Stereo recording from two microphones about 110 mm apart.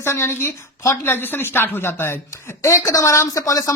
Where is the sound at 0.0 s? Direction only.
25° left (ahead or behind).